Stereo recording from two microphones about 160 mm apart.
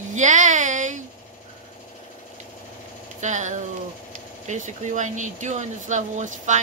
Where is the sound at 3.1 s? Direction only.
50° right (ahead or behind).